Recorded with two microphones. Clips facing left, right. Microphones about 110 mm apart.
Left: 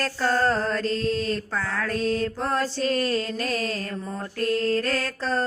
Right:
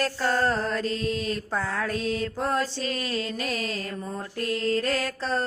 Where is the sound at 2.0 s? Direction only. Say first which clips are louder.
Left 3 dB; 40° left (ahead or behind).